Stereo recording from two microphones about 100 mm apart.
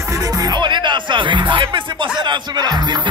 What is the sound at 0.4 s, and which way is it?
Music, 45° right (ahead or behind).